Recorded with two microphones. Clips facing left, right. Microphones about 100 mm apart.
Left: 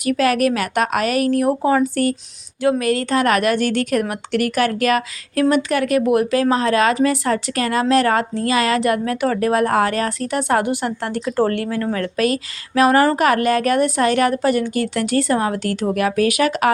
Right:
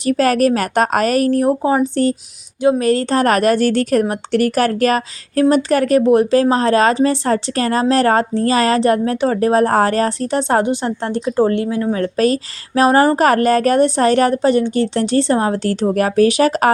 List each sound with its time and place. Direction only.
0.0 s a woman's voice: 35° right (ahead or behind); by 12.0 s 20° right (ahead or behind)
12.0 s a woman's voice: 30° right (ahead or behind)